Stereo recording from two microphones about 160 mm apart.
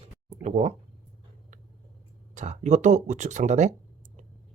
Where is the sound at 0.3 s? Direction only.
45° right (ahead or behind).